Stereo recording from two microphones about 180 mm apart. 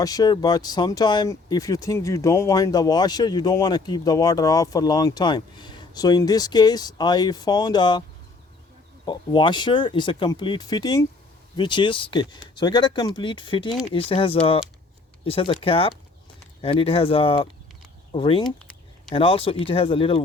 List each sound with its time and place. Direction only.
0.0 s speech: 20° left (ahead or behind)
9.0 s speech: 25° left (ahead or behind)
18.4 s a sound: 5° left (ahead or behind)
19.1 s speech: 30° left (ahead or behind)